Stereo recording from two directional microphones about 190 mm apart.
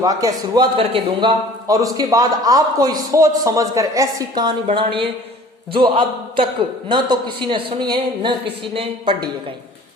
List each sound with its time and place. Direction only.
0.0 s a man's voice: 20° right (ahead or behind)